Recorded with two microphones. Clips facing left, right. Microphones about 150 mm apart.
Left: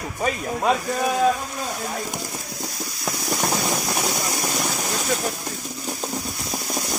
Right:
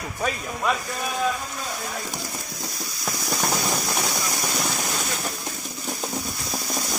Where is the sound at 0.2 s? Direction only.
30° left (ahead or behind).